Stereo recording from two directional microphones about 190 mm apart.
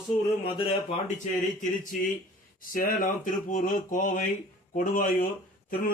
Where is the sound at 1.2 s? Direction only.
40° left (ahead or behind).